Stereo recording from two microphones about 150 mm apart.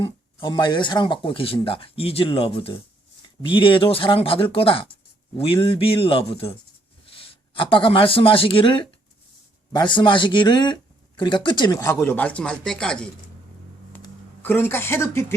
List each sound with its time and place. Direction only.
0.0 s speech: 30° left (ahead or behind); by 13.1 s 5° left (ahead or behind)
14.4 s speech: 10° left (ahead or behind)